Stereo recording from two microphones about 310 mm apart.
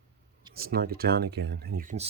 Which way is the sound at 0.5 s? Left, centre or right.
Right.